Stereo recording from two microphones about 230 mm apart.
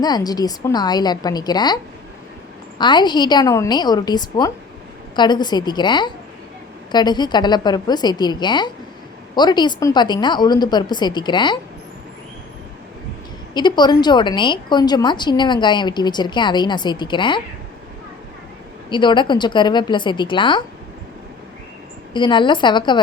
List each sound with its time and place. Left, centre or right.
0.0 s a woman's voice: centre
13.5 s a woman's voice: centre
18.9 s a woman's voice: centre
22.1 s a woman's voice: left